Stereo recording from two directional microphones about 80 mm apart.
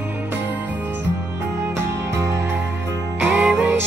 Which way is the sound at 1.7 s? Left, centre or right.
Right.